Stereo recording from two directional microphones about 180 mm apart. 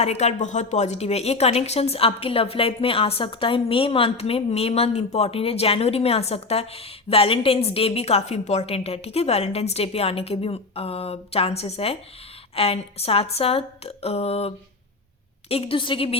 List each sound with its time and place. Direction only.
0.0 s a woman's voice: 35° left (ahead or behind)